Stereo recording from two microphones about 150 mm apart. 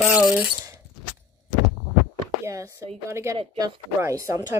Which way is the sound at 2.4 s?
20° right (ahead or behind).